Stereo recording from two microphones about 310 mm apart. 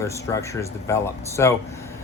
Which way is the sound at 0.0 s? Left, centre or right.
Centre.